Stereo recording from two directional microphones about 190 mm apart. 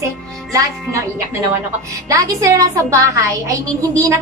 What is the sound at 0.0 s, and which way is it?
A woman's voice, 15° right (ahead or behind).